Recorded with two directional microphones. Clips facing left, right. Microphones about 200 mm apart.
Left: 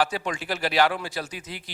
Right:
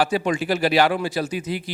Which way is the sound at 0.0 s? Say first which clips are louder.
Right 6 dB; 10° right (ahead or behind).